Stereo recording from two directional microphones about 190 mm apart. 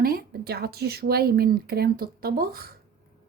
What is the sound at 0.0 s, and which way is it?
Speech, 55° right (ahead or behind).